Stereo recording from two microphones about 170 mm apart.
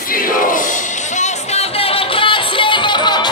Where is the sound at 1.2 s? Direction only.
35° left (ahead or behind).